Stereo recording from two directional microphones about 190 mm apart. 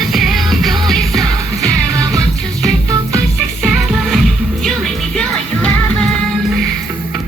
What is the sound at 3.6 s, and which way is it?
Music, centre (ahead or behind).